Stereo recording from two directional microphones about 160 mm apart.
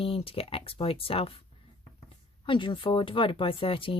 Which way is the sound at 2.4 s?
30° left (ahead or behind).